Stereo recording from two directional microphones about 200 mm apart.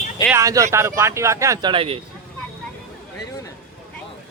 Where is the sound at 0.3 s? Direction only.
15° right (ahead or behind).